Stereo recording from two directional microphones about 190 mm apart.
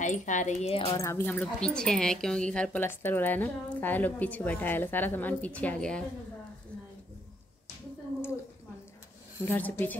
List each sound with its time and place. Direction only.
0.0 s speech: 40° left (ahead or behind)
0.9 s speech: 15° left (ahead or behind)
9.4 s speech: 10° left (ahead or behind)